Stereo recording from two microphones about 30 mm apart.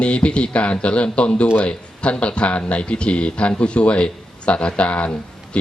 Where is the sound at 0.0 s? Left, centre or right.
Left.